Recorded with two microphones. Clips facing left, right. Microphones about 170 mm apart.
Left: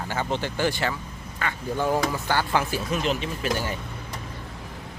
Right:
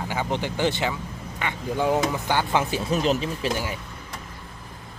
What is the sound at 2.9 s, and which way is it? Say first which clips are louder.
Speech: right 5 dB; 35° right (ahead or behind).